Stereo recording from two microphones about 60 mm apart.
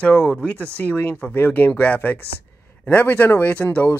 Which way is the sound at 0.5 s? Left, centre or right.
Left.